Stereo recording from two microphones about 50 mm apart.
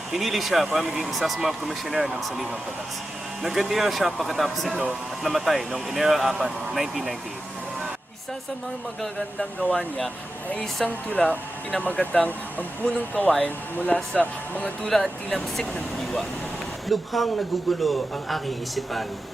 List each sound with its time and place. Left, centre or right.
0.1 s speech: centre
10.8 s speech: left
14.8 s speech: centre